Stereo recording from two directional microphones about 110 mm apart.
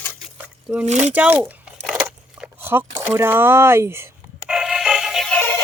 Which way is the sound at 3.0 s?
20° right (ahead or behind).